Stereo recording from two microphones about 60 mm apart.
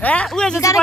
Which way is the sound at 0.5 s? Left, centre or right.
Left.